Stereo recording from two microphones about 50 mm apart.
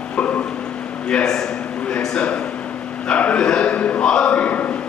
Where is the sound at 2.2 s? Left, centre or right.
Left.